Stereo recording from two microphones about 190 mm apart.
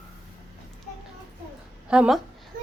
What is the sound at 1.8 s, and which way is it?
Speech, 5° right (ahead or behind).